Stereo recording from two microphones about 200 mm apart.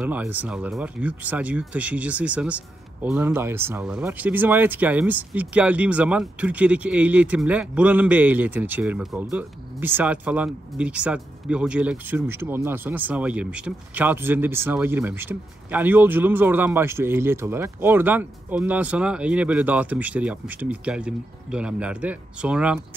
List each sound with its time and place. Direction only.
0.0 s speech: 5° right (ahead or behind)